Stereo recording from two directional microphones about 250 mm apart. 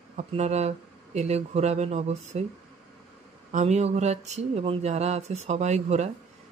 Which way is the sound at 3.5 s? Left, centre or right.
Right.